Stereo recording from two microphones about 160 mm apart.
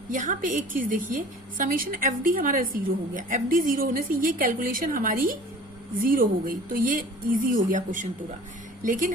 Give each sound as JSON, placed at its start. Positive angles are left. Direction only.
{"t": 0.1, "sound": "a woman's voice", "side_deg": -55}